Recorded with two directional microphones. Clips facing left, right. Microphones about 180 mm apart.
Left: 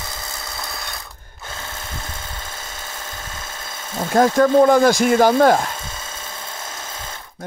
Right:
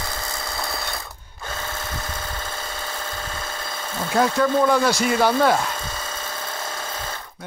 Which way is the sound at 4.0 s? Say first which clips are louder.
Left 5 dB; 45° left (ahead or behind).